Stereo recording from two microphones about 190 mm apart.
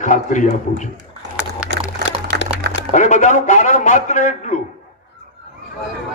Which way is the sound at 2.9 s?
40° left (ahead or behind).